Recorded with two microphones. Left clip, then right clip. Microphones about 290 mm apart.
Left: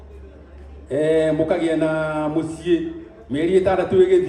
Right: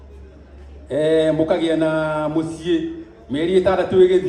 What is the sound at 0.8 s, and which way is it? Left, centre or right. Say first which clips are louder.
Mantra: right 1 dB; right.